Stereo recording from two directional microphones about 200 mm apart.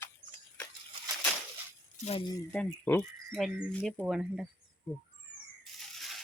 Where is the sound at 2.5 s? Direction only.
10° left (ahead or behind).